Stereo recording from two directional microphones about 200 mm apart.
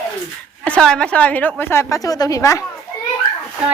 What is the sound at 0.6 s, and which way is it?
A woman's voice, 5° left (ahead or behind).